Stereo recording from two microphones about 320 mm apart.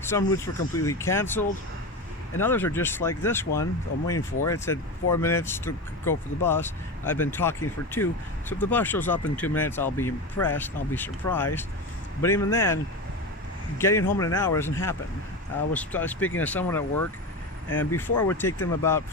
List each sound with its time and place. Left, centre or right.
0.0 s speech: centre
2.4 s speech: centre